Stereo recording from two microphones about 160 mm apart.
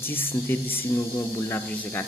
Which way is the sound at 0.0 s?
15° left (ahead or behind).